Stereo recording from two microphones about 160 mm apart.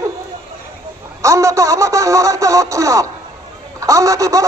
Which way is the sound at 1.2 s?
20° right (ahead or behind).